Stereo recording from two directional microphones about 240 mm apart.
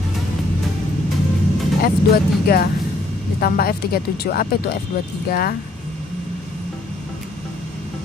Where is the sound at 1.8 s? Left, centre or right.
Left.